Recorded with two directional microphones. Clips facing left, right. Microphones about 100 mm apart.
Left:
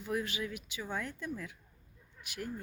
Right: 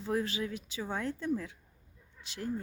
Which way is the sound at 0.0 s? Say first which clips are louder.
Right 3 dB; 30° right (ahead or behind).